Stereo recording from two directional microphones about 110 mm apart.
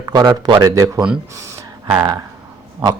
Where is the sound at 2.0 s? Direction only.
40° right (ahead or behind).